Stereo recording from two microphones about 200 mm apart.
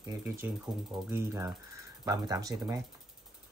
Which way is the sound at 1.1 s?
15° right (ahead or behind).